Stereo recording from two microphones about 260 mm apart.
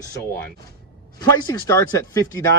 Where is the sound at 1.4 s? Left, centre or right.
Centre.